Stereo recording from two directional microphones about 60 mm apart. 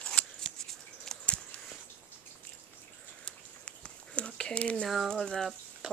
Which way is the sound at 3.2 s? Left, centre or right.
Centre.